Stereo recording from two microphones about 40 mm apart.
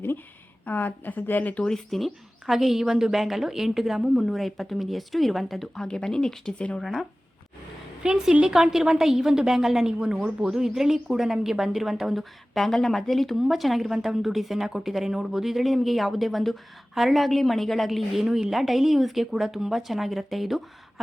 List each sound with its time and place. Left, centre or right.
0.6 s a woman's voice: left
1.7 s a woman's voice: centre
5.8 s speech: centre
8.0 s a woman's voice: centre
12.5 s a woman's voice: centre
13.3 s a woman's voice: centre
18.3 s a woman's voice: centre